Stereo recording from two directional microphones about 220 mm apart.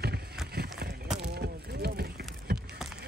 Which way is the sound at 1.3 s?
45° right (ahead or behind).